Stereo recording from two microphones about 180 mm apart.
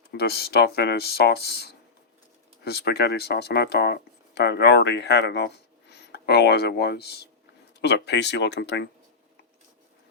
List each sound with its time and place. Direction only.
0.1 s speech: 60° left (ahead or behind)